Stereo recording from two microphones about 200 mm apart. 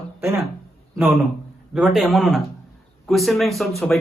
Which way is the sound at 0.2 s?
15° right (ahead or behind).